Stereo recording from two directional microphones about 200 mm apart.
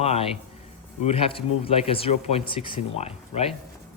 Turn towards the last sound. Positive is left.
turn(degrees=30)  # may be behind; listen again after turning